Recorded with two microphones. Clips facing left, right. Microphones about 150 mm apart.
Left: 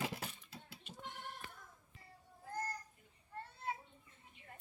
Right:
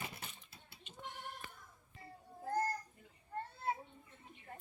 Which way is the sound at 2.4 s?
40° right (ahead or behind).